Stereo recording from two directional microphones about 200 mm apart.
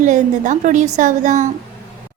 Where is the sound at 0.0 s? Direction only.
40° right (ahead or behind).